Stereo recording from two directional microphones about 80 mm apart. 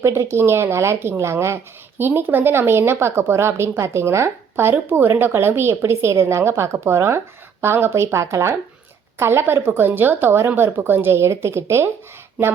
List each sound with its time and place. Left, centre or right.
0.0 s a woman's voice: right